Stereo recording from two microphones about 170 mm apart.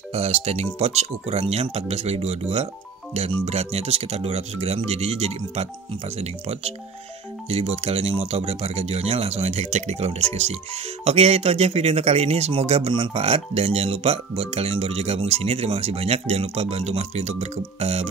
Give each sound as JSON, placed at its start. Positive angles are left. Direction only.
{"t": 0.1, "sound": "speech", "side_deg": -40}